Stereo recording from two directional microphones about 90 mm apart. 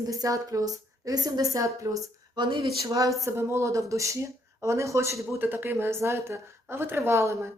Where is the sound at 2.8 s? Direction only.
40° right (ahead or behind).